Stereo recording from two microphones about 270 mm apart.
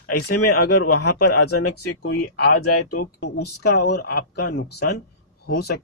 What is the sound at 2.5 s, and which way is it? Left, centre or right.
Speech, left.